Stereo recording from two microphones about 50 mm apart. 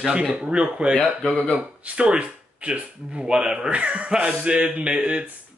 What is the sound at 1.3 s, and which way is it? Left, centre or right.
Speech, left.